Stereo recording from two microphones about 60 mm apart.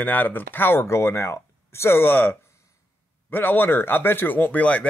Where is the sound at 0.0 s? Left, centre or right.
Left.